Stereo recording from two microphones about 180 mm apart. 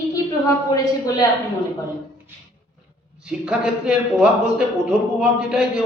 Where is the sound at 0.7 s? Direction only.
20° left (ahead or behind).